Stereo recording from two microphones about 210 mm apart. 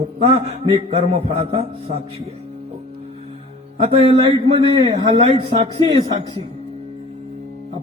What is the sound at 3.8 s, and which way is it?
A man's voice, 25° right (ahead or behind).